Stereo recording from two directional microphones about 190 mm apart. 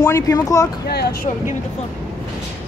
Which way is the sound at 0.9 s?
60° left (ahead or behind).